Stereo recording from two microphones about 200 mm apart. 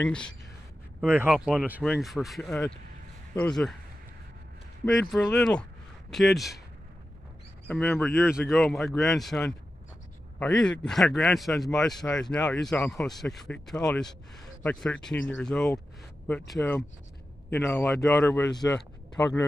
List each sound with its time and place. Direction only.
0.0 s speech: 5° left (ahead or behind)
1.0 s speech: 10° right (ahead or behind)
4.8 s speech: centre (ahead or behind)
7.6 s a man's voice: 10° left (ahead or behind)
8.3 s a man's voice: centre (ahead or behind)
18.2 s a man's voice: 15° left (ahead or behind)